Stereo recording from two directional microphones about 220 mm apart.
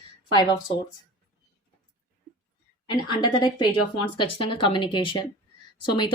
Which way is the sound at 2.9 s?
20° left (ahead or behind).